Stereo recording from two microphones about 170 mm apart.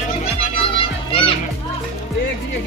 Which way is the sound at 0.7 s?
30° left (ahead or behind).